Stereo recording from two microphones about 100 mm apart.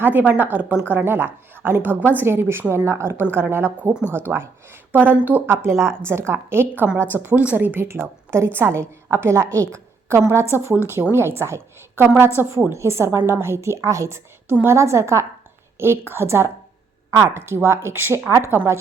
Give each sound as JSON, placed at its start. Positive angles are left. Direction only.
{"t": 0.0, "sound": "a woman's voice", "side_deg": -20}